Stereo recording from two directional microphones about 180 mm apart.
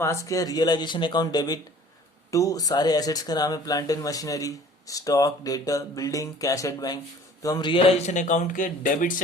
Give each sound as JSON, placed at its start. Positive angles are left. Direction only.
{"t": 0.0, "sound": "a man's voice", "side_deg": 15}